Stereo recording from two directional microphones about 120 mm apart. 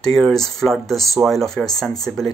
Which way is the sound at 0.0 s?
5° left (ahead or behind).